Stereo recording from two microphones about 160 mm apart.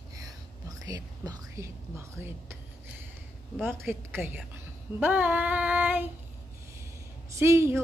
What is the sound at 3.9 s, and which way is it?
Speech, 10° right (ahead or behind).